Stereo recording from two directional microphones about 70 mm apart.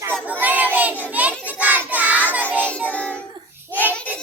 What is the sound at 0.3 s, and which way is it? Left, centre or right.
Child singing, right.